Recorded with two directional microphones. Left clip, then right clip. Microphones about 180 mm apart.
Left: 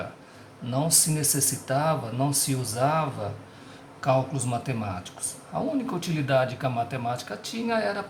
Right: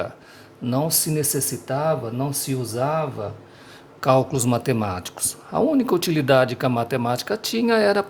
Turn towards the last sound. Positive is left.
turn(degrees=-55)  # may be behind; listen again after turning